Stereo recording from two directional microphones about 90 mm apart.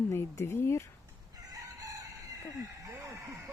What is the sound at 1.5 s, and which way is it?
Crowing, 40° right (ahead or behind).